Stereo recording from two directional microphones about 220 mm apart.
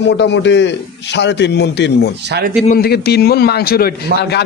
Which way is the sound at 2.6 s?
45° left (ahead or behind).